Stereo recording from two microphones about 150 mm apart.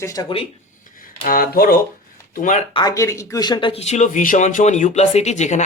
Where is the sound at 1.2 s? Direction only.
70° left (ahead or behind).